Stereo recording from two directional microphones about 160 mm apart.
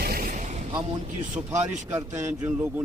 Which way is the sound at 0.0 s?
65° right (ahead or behind).